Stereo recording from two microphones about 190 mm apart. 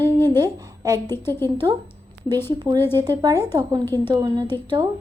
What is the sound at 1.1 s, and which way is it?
Speech, 10° left (ahead or behind).